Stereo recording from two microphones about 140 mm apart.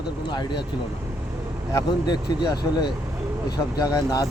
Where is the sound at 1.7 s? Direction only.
30° left (ahead or behind).